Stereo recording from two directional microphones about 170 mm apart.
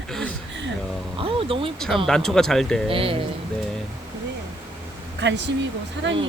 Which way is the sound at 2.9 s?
30° right (ahead or behind).